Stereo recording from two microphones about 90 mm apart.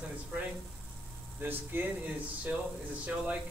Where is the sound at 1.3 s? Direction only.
20° right (ahead or behind).